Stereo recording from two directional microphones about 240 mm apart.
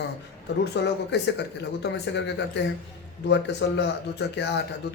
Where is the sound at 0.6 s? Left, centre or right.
Left.